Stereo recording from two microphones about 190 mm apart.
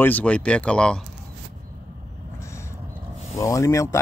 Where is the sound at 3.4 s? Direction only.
15° left (ahead or behind).